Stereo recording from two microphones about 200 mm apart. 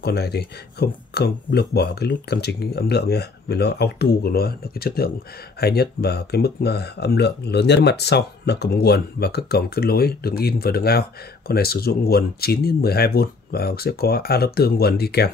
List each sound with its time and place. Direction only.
0.0 s speech: 55° left (ahead or behind)